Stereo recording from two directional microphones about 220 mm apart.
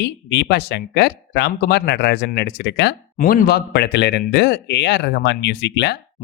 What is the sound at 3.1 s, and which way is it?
Speech, 40° left (ahead or behind).